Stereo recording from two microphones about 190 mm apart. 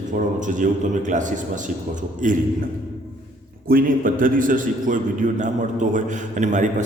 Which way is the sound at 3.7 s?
50° right (ahead or behind).